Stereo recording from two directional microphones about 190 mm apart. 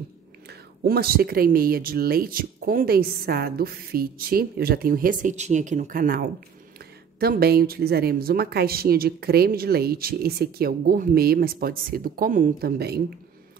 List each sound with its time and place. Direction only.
0.5 s speech: 55° right (ahead or behind)